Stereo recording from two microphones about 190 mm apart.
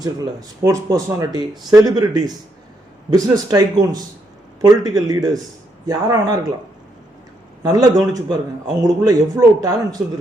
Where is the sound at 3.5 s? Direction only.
20° right (ahead or behind).